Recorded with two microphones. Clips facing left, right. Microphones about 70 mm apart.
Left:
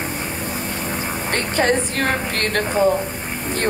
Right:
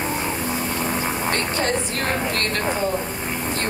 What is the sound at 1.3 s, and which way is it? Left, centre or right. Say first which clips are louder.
Speech: left 6 dB; left.